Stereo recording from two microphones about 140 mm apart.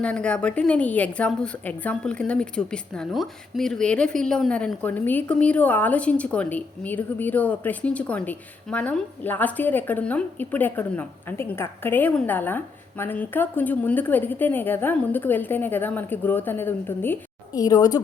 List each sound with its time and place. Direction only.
0.0 s a woman's voice: 10° left (ahead or behind)
17.5 s a woman's voice: 25° left (ahead or behind)